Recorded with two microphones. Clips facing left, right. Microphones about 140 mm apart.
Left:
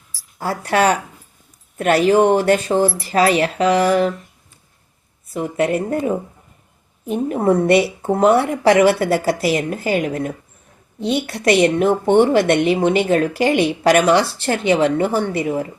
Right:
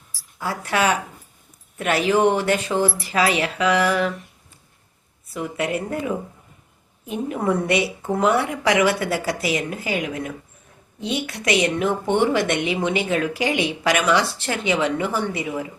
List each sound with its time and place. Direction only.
0.3 s a woman's voice: 35° left (ahead or behind)
5.3 s a woman's voice: 35° left (ahead or behind)
12.3 s a woman's voice: 55° left (ahead or behind)